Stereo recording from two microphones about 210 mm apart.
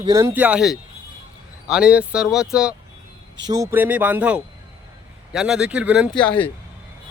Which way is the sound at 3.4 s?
15° right (ahead or behind).